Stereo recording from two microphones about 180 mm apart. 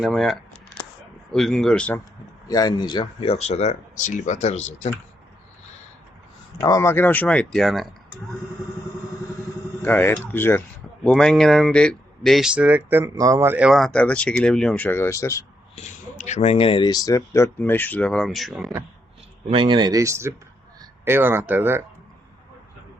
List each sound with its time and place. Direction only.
0.0 s speech: centre (ahead or behind)
2.5 s speech: 20° left (ahead or behind); by 4.9 s 40° left (ahead or behind)
6.6 s speech: 20° left (ahead or behind); by 7.9 s centre (ahead or behind)
9.8 s speech: 10° left (ahead or behind)
15.7 s speech: 40° left (ahead or behind); by 18.7 s centre (ahead or behind)
19.5 s speech: 30° right (ahead or behind); by 21.8 s 10° right (ahead or behind)